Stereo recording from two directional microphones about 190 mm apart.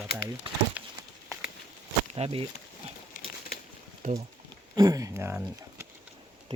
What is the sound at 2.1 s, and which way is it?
Speech, 30° right (ahead or behind).